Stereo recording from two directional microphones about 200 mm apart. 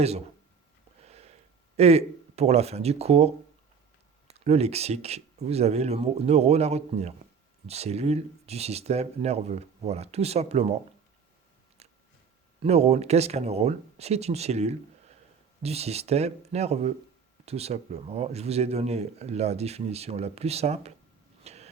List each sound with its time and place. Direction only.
1.0 s a sound: 30° right (ahead or behind)
1.7 s speech: 30° right (ahead or behind)
4.4 s speech: 30° right (ahead or behind)
11.8 s a sound: 30° right (ahead or behind)
12.6 s speech: 30° right (ahead or behind)
21.4 s vehicle: 30° right (ahead or behind)